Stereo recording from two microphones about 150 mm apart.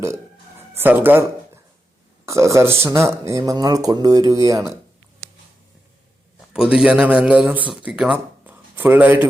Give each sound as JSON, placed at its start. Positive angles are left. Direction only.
{"t": 0.8, "sound": "a man's voice", "side_deg": -15}
{"t": 2.2, "sound": "speech", "side_deg": -20}
{"t": 6.5, "sound": "a man's voice", "side_deg": -5}